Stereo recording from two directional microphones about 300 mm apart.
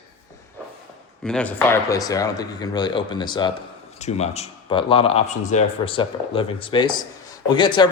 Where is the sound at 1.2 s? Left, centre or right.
Centre.